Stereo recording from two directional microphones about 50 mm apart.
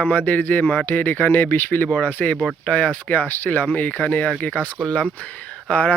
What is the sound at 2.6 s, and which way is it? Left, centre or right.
Speech, left.